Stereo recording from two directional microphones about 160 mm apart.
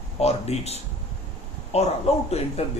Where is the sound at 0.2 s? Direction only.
40° left (ahead or behind).